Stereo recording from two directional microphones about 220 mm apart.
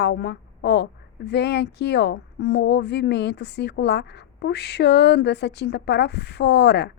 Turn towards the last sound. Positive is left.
turn(degrees=50)  # may be behind; listen again after turning